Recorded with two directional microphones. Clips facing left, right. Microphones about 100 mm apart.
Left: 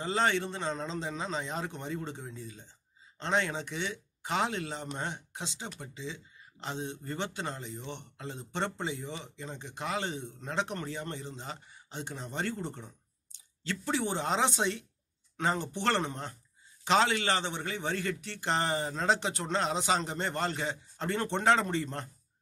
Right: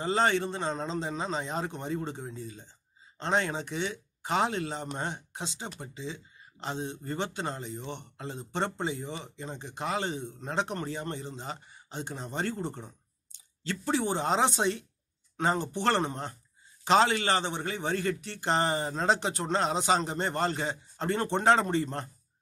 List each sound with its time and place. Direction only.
0.0 s speech: 35° right (ahead or behind)